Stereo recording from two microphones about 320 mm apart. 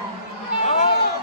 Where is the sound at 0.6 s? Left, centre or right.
Left.